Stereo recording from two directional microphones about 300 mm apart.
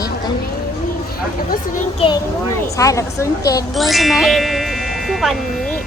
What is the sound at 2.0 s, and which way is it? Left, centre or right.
Speech, centre.